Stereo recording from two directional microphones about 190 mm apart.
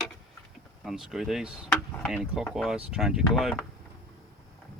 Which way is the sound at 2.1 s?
5° right (ahead or behind).